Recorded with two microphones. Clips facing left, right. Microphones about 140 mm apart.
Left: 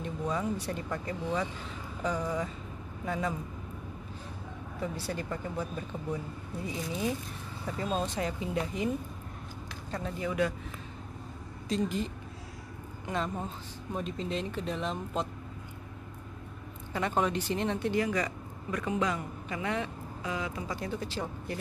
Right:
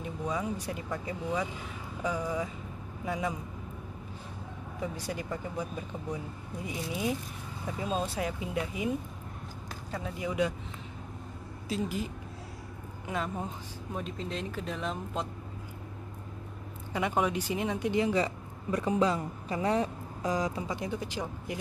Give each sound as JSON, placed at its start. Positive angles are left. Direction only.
{"t": 0.0, "sound": "speech", "side_deg": -10}
{"t": 4.7, "sound": "speech", "side_deg": -10}
{"t": 11.7, "sound": "speech", "side_deg": -5}
{"t": 16.9, "sound": "speech", "side_deg": -10}
{"t": 20.6, "sound": "speech", "side_deg": -20}